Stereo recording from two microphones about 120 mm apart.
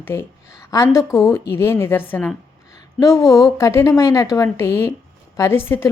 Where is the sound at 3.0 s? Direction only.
30° left (ahead or behind).